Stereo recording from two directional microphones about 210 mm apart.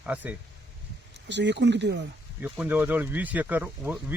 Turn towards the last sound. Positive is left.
turn(degrees=-10)  # may be behind; listen again after turning